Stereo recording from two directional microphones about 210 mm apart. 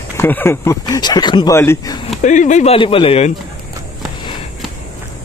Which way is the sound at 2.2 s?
35° left (ahead or behind).